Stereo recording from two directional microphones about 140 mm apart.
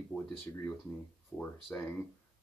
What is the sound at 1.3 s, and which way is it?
Speech, 10° left (ahead or behind).